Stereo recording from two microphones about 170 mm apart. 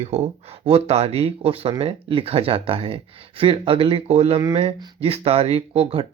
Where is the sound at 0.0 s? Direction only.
35° right (ahead or behind).